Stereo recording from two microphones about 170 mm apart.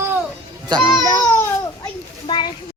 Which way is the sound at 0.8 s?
Centre (ahead or behind).